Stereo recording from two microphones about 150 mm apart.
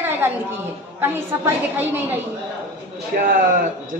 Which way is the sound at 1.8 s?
15° right (ahead or behind).